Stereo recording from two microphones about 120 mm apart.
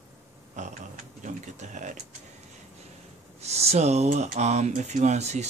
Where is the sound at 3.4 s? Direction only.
60° right (ahead or behind).